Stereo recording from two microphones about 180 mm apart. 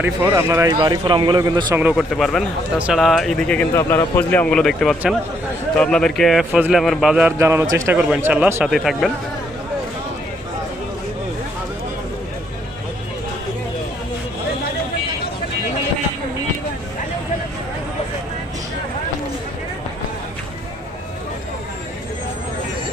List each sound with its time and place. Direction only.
0.0 s speech: 10° right (ahead or behind)
1.8 s speech: 5° right (ahead or behind)
7.3 s speech: 15° right (ahead or behind)